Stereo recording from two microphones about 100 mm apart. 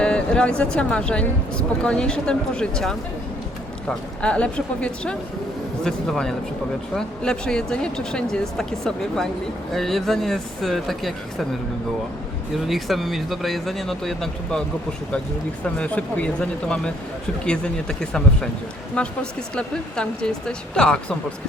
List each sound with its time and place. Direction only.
0.0 s speech: 10° left (ahead or behind)
12.5 s speech: centre (ahead or behind)
15.6 s speech: 15° left (ahead or behind)